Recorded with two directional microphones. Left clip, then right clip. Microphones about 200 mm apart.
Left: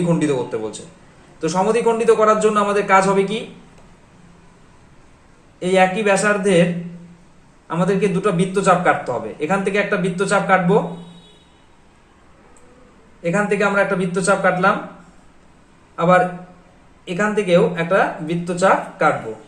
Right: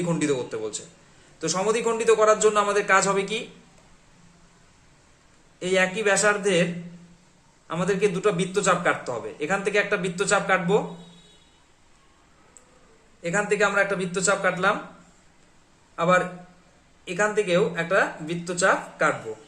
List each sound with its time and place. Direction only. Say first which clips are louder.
0.1 s a man's voice: left 6 dB; 25° right (ahead or behind)
5.5 s a man's voice: left 7 dB; 25° right (ahead or behind)
7.7 s a man's voice: left 5 dB; 30° right (ahead or behind)
13.2 s a man's voice: left 4 dB; 30° right (ahead or behind)
16.0 s a man's voice: left 6 dB; 30° right (ahead or behind)